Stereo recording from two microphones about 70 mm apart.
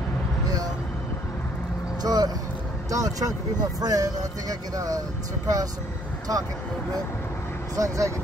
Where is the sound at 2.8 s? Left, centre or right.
Right.